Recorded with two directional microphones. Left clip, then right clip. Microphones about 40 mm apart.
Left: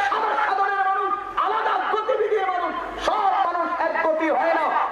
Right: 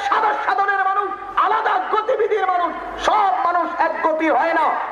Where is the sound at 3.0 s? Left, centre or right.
Right.